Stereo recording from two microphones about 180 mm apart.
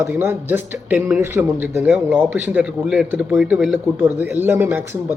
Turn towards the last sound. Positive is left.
turn(degrees=-15)  # may be behind; listen again after turning